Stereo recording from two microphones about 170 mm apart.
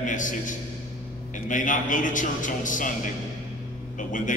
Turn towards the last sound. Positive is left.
turn(degrees=50)  # may be behind; listen again after turning